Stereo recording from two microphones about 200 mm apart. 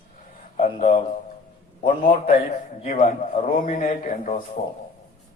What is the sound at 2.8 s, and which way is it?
A man's voice, 40° left (ahead or behind).